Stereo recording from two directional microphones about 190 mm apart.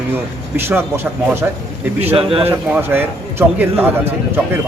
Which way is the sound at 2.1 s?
30° right (ahead or behind).